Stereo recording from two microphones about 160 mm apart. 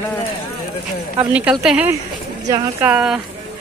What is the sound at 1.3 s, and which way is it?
Speech, 5° right (ahead or behind).